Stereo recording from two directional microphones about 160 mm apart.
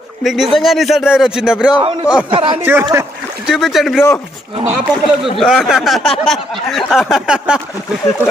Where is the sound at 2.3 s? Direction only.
30° right (ahead or behind).